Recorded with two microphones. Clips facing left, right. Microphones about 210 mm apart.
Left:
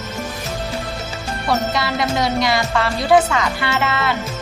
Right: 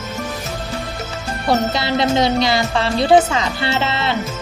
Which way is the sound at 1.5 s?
30° right (ahead or behind).